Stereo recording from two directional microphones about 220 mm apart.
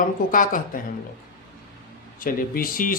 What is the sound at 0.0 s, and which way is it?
Speech, 40° left (ahead or behind).